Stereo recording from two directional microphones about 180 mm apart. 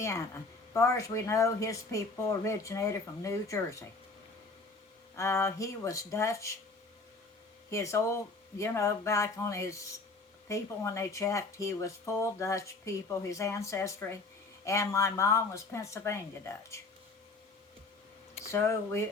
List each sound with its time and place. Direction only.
0.7 s speech: 15° left (ahead or behind)
5.1 s speech: 15° left (ahead or behind)
7.7 s speech: 15° left (ahead or behind)
18.5 s speech: 15° left (ahead or behind)